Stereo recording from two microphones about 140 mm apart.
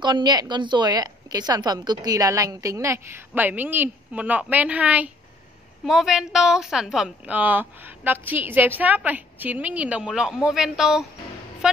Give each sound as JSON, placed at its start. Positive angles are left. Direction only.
{"t": 0.0, "sound": "a woman's voice", "side_deg": -30}